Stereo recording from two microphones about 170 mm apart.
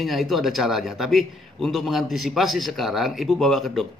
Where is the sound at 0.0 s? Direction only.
Centre (ahead or behind).